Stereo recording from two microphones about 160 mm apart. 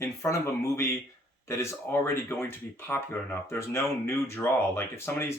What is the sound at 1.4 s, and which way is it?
Speech, 15° left (ahead or behind).